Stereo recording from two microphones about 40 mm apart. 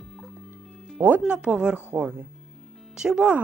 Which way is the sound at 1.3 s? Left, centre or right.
Right.